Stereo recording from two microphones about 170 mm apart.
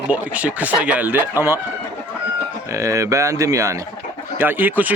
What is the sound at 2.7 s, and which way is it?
Speech, 15° right (ahead or behind).